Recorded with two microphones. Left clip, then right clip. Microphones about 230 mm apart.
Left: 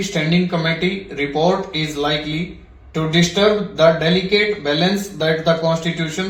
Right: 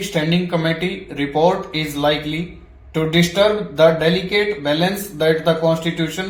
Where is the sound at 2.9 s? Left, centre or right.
Right.